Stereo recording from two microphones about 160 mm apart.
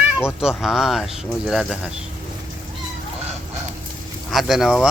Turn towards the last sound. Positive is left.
turn(degrees=-5)  # may be behind; listen again after turning